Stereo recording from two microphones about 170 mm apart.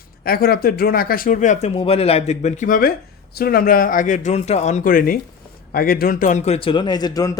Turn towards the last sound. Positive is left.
turn(degrees=20)  # may be behind; listen again after turning